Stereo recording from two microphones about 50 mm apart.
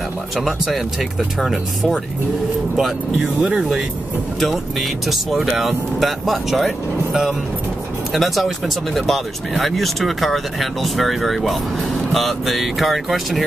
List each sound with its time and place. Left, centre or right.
1.4 s speech: centre
3.3 s speech: centre
5.0 s speech: centre
8.1 s speech: centre